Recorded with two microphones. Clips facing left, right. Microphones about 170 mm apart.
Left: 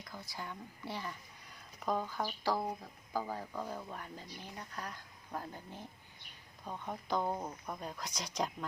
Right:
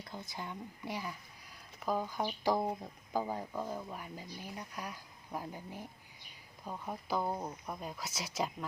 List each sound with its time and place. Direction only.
0.0 s speech: 20° right (ahead or behind); by 8.5 s 5° right (ahead or behind)